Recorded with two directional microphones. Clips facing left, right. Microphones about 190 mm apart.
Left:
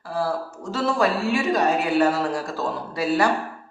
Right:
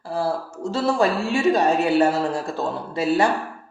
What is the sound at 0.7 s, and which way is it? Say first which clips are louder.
A man's voice: right 2 dB; 25° right (ahead or behind).